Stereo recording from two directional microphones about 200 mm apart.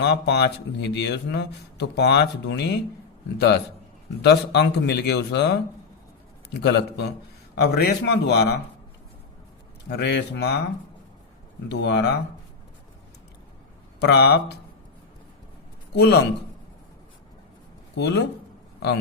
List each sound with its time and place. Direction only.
0.0 s a man's voice: 55° left (ahead or behind)
9.9 s speech: 60° left (ahead or behind)
11.7 s speech: 55° left (ahead or behind)
14.0 s speech: 55° left (ahead or behind)
16.0 s speech: 55° left (ahead or behind)
17.9 s speech: 60° left (ahead or behind)